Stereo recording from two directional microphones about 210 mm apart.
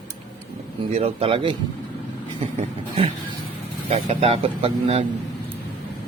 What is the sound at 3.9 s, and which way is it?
Speech, 30° right (ahead or behind).